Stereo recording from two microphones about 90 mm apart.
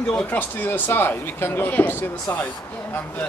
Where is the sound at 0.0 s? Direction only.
10° left (ahead or behind).